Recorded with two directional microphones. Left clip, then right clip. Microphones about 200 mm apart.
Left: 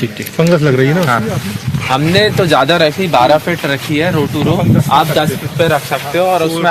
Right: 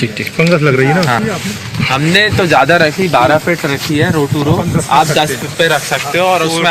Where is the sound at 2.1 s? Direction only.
55° left (ahead or behind).